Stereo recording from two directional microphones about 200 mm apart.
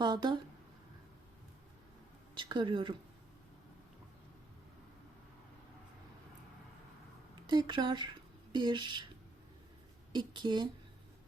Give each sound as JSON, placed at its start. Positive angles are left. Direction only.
{"t": 0.0, "sound": "speech", "side_deg": -20}
{"t": 2.3, "sound": "speech", "side_deg": -25}
{"t": 7.4, "sound": "speech", "side_deg": -20}
{"t": 10.1, "sound": "speech", "side_deg": -20}